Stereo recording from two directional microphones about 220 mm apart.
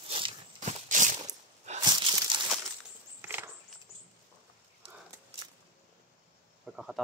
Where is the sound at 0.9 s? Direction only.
35° right (ahead or behind).